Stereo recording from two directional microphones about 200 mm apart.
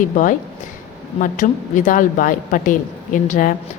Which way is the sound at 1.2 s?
40° left (ahead or behind).